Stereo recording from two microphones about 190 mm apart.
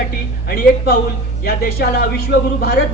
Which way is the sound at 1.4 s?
55° left (ahead or behind).